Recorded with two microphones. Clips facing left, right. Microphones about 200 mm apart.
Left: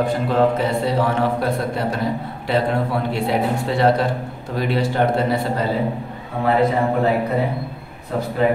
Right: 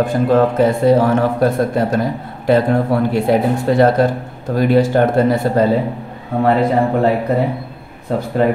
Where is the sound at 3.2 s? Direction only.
45° right (ahead or behind).